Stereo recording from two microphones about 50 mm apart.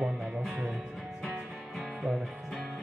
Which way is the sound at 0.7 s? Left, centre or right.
Centre.